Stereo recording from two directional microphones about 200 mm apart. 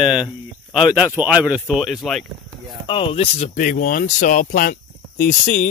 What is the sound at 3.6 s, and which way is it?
Speech, 45° left (ahead or behind).